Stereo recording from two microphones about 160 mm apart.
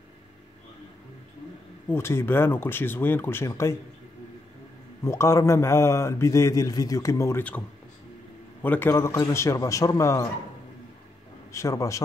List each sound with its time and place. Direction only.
1.9 s speech: 15° left (ahead or behind)
5.0 s speech: 20° left (ahead or behind)
8.6 s speech: 15° left (ahead or behind)
11.5 s a man's voice: 20° left (ahead or behind)